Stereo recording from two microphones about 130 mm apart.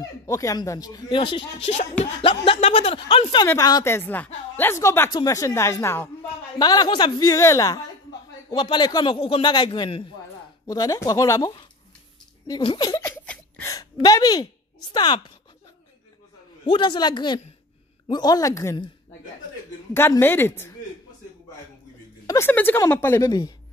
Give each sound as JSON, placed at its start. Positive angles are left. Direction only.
{"t": 0.3, "sound": "speech", "side_deg": 25}
{"t": 1.7, "sound": "speech", "side_deg": 65}
{"t": 2.2, "sound": "speech", "side_deg": 45}
{"t": 3.4, "sound": "speech", "side_deg": 25}
{"t": 3.9, "sound": "a woman's voice", "side_deg": 15}
{"t": 8.5, "sound": "a man's voice", "side_deg": 35}
{"t": 10.7, "sound": "a man's voice", "side_deg": 30}
{"t": 13.0, "sound": "a sound", "side_deg": 15}
{"t": 14.0, "sound": "speech", "side_deg": 30}
{"t": 16.6, "sound": "a man's voice", "side_deg": 40}
{"t": 19.9, "sound": "a woman's voice", "side_deg": 20}
{"t": 22.2, "sound": "a sound", "side_deg": 25}
{"t": 22.5, "sound": "speech", "side_deg": 15}